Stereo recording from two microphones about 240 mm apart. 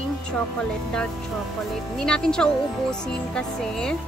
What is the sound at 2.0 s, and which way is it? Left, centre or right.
Speech, centre.